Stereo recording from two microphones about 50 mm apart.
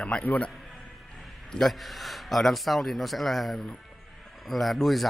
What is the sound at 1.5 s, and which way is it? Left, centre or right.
A man's voice, centre.